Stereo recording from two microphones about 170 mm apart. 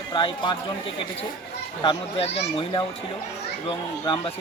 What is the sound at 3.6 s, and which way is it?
Speech, 30° left (ahead or behind).